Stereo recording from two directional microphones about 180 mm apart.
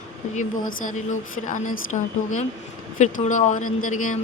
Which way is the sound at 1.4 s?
45° left (ahead or behind).